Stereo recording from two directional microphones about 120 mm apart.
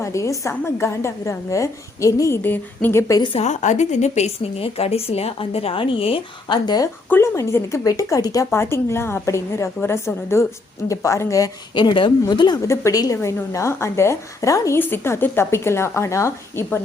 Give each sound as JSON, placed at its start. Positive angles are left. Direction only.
{"t": 0.0, "sound": "speech", "side_deg": 25}
{"t": 3.3, "sound": "a woman's voice", "side_deg": 70}
{"t": 7.1, "sound": "speech", "side_deg": 20}
{"t": 11.7, "sound": "speech", "side_deg": 40}
{"t": 12.6, "sound": "speech", "side_deg": 25}